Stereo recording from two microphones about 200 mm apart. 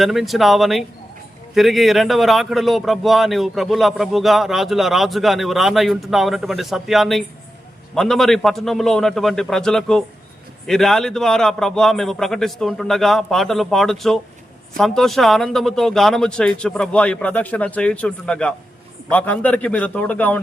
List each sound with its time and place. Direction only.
0.0 s a man's voice: centre (ahead or behind)